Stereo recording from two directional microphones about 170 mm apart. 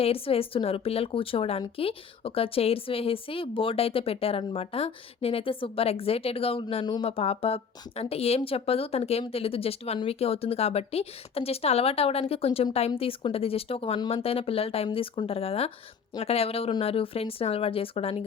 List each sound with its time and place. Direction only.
0.0 s a woman's voice: 35° left (ahead or behind)